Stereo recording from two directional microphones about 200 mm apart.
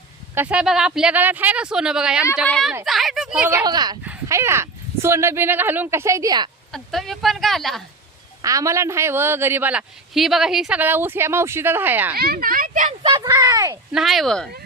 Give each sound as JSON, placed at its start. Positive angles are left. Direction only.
{"t": 0.3, "sound": "speech", "side_deg": -5}
{"t": 3.6, "sound": "speech", "side_deg": -20}
{"t": 6.7, "sound": "speech", "side_deg": 0}
{"t": 8.4, "sound": "a man's voice", "side_deg": -15}
{"t": 12.1, "sound": "speech", "side_deg": -50}
{"t": 13.1, "sound": "speech", "side_deg": -20}
{"t": 13.9, "sound": "speech", "side_deg": 0}